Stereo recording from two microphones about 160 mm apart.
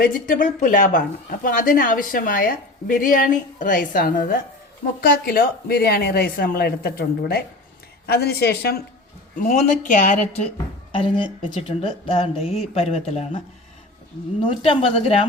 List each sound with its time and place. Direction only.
0.0 s a woman's voice: 60° left (ahead or behind); by 8.8 s 90° left
9.4 s speech: 55° left (ahead or behind)
10.9 s speech: 35° left (ahead or behind)
14.4 s speech: 35° left (ahead or behind)